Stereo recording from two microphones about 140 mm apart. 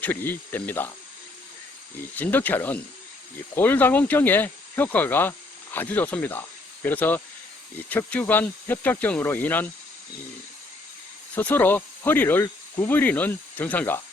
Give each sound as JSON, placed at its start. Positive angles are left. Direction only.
{"t": 0.0, "sound": "speech", "side_deg": 15}
{"t": 2.1, "sound": "speech", "side_deg": 10}
{"t": 11.3, "sound": "speech", "side_deg": 15}